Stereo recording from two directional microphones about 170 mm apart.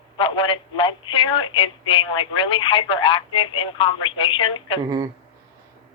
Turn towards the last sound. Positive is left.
turn(degrees=30)  # may be behind; listen again after turning